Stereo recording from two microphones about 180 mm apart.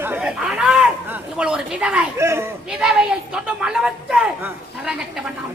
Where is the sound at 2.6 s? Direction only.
5° right (ahead or behind).